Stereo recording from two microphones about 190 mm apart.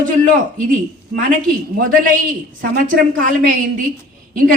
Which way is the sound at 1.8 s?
45° right (ahead or behind).